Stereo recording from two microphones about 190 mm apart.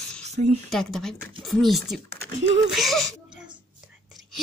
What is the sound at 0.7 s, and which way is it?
Speech, centre (ahead or behind).